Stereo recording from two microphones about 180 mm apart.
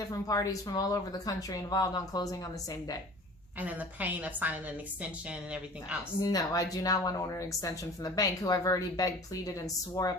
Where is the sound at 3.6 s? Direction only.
10° right (ahead or behind).